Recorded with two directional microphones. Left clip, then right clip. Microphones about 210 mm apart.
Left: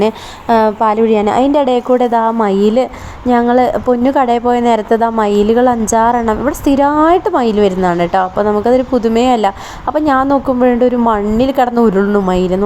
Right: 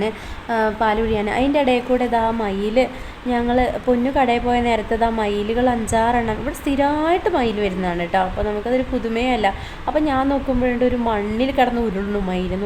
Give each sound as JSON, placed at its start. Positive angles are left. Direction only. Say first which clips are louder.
{"t": 0.0, "sound": "a woman's voice", "louder": "left 9 dB", "side_deg": 30}